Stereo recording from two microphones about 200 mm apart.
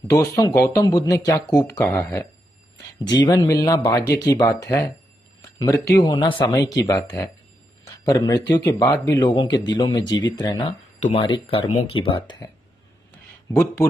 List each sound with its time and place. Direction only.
0.1 s speech: 15° left (ahead or behind)
13.5 s speech: 15° left (ahead or behind)